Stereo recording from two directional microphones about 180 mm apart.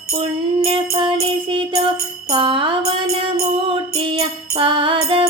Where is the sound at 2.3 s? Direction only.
30° right (ahead or behind).